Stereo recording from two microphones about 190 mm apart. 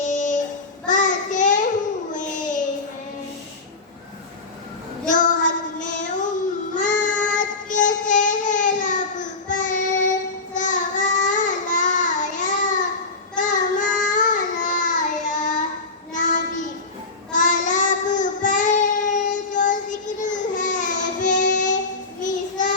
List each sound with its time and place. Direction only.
0.0 s child singing: 40° left (ahead or behind)
2.1 s a sound: 40° left (ahead or behind)
5.0 s child singing: 40° left (ahead or behind)